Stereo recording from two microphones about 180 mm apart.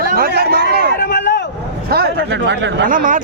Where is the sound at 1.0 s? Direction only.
65° left (ahead or behind).